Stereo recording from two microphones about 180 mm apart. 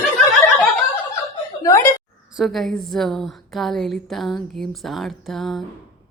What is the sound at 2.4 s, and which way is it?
A woman's voice, centre (ahead or behind).